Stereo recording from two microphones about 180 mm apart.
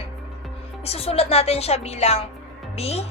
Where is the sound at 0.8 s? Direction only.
35° left (ahead or behind).